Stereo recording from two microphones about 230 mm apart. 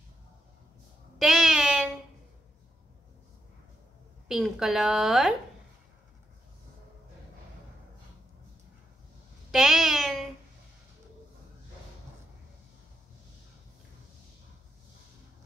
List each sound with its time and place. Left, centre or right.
1.1 s meow: centre
4.3 s a woman's voice: centre
9.5 s a sound: centre